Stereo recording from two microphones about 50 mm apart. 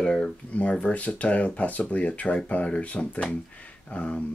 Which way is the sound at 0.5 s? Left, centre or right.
Left.